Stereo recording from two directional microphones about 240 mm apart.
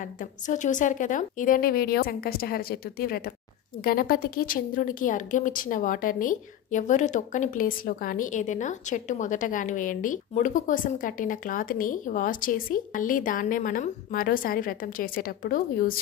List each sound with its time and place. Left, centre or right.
0.2 s speech: left